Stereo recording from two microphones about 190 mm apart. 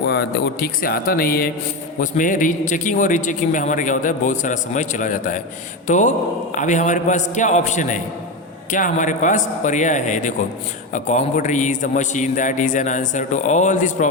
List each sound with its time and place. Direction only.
0.1 s a man's voice: 55° left (ahead or behind); by 14.1 s 40° left (ahead or behind)